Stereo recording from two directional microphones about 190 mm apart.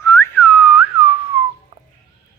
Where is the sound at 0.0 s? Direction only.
15° left (ahead or behind).